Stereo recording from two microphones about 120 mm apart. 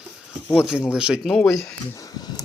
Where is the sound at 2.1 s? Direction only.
35° left (ahead or behind).